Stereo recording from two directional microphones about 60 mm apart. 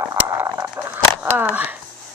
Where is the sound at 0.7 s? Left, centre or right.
Right.